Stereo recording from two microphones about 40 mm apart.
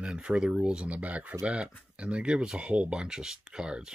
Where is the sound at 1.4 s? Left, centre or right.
Right.